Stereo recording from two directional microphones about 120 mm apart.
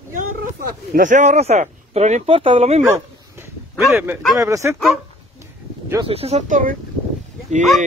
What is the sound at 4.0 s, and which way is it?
Speech, 20° right (ahead or behind).